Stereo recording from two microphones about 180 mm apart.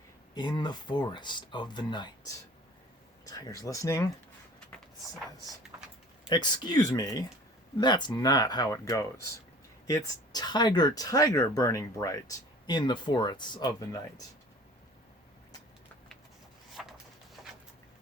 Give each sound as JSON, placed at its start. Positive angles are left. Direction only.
{"t": 0.3, "sound": "speech", "side_deg": 25}
{"t": 5.7, "sound": "a sound", "side_deg": -10}
{"t": 6.2, "sound": "speech", "side_deg": 25}